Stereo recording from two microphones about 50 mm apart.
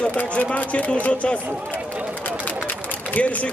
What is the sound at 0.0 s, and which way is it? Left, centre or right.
Speech, left.